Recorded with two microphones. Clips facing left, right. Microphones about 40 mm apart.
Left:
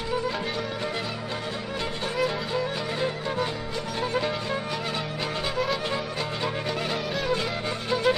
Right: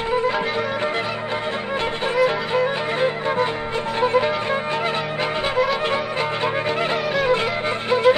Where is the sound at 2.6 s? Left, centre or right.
Right.